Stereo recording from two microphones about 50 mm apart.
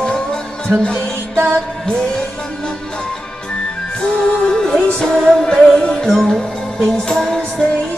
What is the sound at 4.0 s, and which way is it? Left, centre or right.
Music, left.